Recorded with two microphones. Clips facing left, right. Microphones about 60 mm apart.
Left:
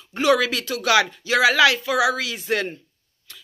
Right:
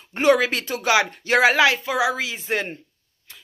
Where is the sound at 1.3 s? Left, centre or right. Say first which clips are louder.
Right 2 dB; right.